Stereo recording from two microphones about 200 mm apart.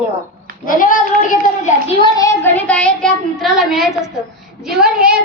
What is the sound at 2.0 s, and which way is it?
A woman's voice, 20° left (ahead or behind).